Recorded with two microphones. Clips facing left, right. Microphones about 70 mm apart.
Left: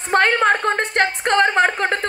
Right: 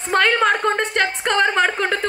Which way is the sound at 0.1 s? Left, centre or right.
Left.